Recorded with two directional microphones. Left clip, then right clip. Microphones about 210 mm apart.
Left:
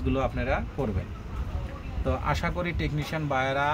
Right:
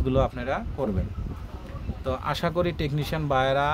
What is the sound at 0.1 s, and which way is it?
Speech, 55° right (ahead or behind).